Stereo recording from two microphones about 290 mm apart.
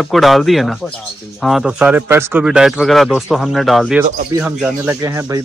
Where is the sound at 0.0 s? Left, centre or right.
Centre.